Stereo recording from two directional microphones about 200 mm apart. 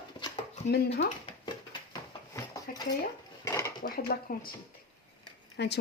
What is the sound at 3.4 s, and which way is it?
Dishes, 15° left (ahead or behind).